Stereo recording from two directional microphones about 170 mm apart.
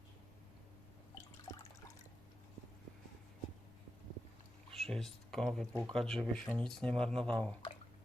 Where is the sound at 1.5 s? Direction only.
15° left (ahead or behind).